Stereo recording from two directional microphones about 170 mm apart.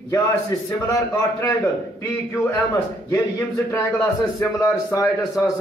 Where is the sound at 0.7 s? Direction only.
20° left (ahead or behind).